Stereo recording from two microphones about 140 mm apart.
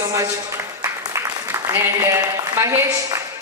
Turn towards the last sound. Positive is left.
turn(degrees=-20)  # may be behind; listen again after turning